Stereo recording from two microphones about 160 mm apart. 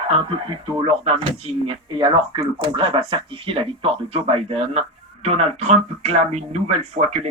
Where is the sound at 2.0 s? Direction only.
30° right (ahead or behind); by 7.1 s 50° right (ahead or behind).